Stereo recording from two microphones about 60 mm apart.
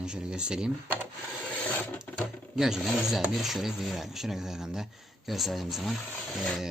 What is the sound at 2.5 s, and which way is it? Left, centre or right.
Speech, centre.